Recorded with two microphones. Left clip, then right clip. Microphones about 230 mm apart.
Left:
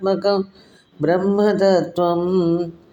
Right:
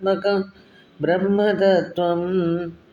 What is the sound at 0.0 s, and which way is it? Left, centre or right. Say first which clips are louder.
Music: left 2 dB; left.